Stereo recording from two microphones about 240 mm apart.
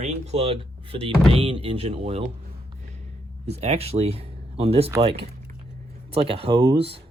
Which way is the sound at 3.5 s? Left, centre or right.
Right.